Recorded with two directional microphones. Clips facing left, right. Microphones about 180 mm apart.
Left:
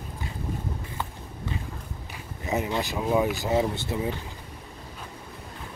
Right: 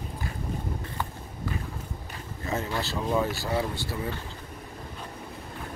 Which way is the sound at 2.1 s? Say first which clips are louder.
Left 3 dB; 15° left (ahead or behind).